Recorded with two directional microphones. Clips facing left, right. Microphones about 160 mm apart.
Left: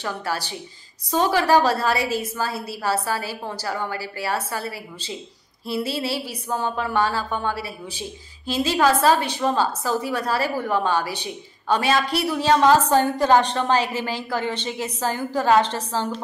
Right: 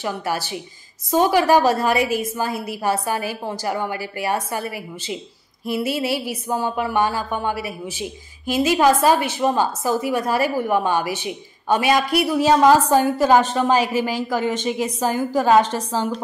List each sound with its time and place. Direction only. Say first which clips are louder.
0.0 s a woman's voice: right 3 dB; 15° right (ahead or behind)